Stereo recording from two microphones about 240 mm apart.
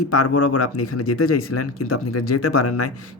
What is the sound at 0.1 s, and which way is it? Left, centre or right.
Speech, left.